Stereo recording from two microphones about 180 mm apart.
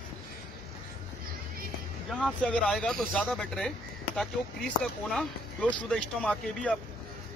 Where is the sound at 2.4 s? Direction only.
5° left (ahead or behind).